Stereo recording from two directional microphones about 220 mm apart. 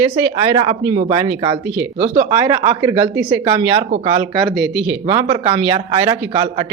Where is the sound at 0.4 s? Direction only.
20° right (ahead or behind).